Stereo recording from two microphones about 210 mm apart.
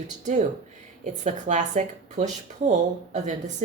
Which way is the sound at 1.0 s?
35° right (ahead or behind).